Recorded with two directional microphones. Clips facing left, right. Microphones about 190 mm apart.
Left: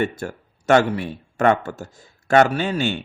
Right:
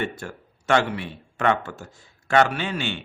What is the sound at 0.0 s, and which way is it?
Speech, 40° left (ahead or behind).